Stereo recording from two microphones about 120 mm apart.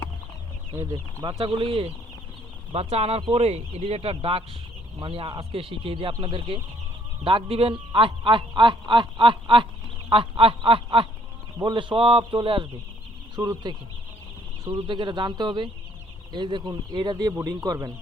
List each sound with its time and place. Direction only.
0.8 s speech: 30° right (ahead or behind)
1.3 s a man's voice: 45° right (ahead or behind)
13.3 s speech: 35° right (ahead or behind)